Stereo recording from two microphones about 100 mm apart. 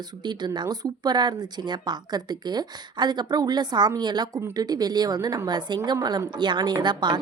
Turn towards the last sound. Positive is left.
turn(degrees=-50)  # may be behind; listen again after turning